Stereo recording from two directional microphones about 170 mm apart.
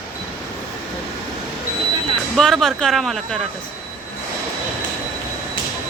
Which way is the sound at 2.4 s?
Centre (ahead or behind).